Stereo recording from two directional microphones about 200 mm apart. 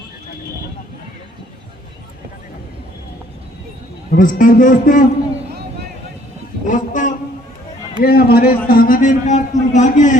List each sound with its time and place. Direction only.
4.1 s a man's voice: 40° left (ahead or behind)
6.7 s a sound: 40° left (ahead or behind)
8.0 s a man's voice: 50° left (ahead or behind)